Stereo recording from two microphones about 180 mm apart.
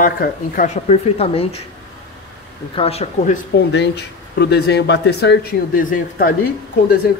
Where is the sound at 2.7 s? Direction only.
35° left (ahead or behind).